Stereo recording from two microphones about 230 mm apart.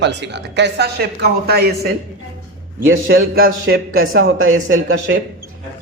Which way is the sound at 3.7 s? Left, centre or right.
Right.